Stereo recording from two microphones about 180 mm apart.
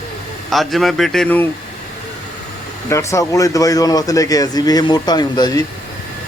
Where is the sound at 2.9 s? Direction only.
15° left (ahead or behind).